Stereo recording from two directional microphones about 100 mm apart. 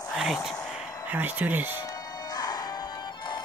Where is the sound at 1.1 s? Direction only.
20° right (ahead or behind).